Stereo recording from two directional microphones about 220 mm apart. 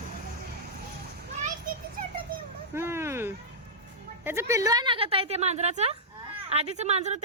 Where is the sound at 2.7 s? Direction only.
10° right (ahead or behind).